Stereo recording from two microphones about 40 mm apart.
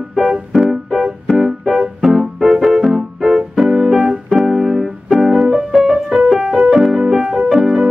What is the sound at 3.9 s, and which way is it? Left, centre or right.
Keyboard, centre.